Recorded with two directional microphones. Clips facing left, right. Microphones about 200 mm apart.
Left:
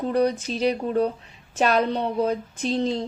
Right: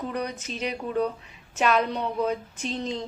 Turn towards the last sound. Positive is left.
turn(degrees=35)  # may be behind; listen again after turning